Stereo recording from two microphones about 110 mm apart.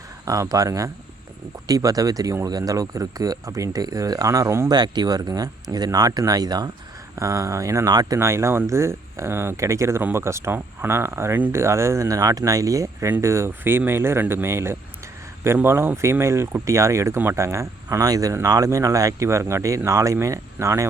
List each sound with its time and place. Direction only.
0.3 s speech: 30° right (ahead or behind)
4.7 s speech: 40° right (ahead or behind)